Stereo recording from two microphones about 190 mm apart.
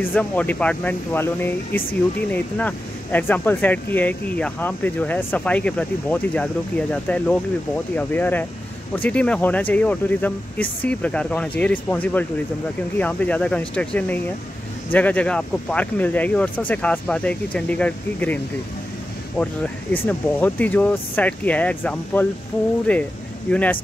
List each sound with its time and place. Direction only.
0.1 s speech: 10° left (ahead or behind)